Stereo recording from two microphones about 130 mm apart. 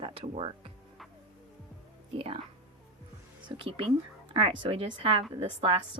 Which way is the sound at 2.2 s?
45° right (ahead or behind).